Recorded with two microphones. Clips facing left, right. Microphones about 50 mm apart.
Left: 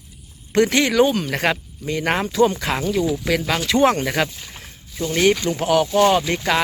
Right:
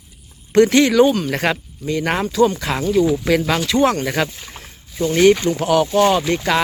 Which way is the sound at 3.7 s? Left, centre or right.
Centre.